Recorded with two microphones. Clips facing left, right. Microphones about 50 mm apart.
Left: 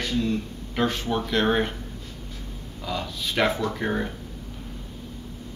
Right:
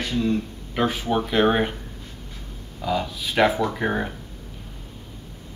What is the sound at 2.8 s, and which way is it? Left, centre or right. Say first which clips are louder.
A man's voice: right 5 dB; centre.